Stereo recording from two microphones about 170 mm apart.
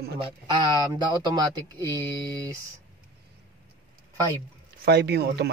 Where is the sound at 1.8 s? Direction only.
20° right (ahead or behind).